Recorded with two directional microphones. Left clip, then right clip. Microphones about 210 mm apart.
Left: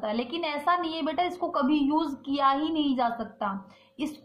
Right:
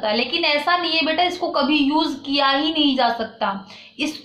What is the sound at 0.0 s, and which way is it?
A woman's voice, 50° left (ahead or behind).